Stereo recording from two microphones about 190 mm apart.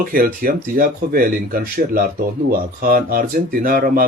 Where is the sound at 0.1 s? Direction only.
50° right (ahead or behind).